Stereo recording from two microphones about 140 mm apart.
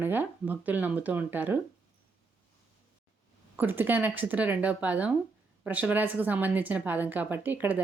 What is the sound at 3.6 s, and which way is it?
A woman's voice, 15° right (ahead or behind).